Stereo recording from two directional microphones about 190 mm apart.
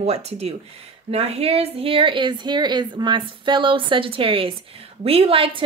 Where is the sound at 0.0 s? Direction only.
35° right (ahead or behind).